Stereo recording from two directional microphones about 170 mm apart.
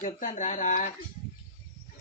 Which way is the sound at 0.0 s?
45° left (ahead or behind).